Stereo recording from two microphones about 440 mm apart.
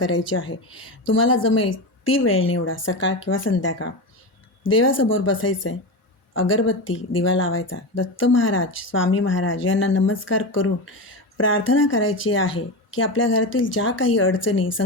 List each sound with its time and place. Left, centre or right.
0.1 s speech: left